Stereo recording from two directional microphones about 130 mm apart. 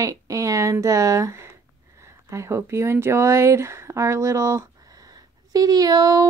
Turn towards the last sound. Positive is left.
turn(degrees=-30)  # may be behind; listen again after turning